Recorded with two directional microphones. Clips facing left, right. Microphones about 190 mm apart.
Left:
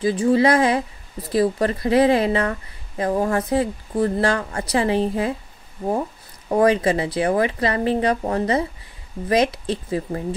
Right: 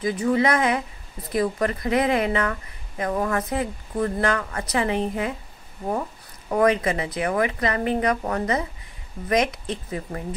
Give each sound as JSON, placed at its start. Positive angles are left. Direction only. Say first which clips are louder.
{"t": 0.0, "sound": "speech", "louder": "left 4 dB", "side_deg": 30}
{"t": 6.5, "sound": "speech", "louder": "left 3 dB", "side_deg": 30}